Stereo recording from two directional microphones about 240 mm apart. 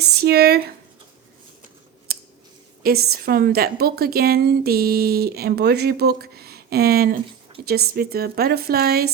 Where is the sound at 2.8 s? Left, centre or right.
Right.